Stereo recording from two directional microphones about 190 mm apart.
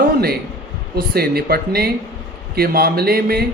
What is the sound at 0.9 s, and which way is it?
Speech, 55° right (ahead or behind).